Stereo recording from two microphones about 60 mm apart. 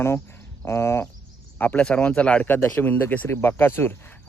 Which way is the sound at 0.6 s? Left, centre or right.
Left.